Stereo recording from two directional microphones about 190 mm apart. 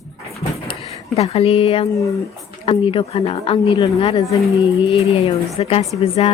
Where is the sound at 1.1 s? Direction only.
35° left (ahead or behind).